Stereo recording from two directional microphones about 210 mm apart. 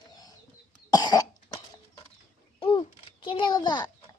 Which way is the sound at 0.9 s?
20° left (ahead or behind).